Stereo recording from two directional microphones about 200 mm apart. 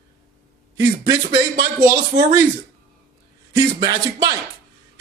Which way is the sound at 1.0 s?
20° right (ahead or behind).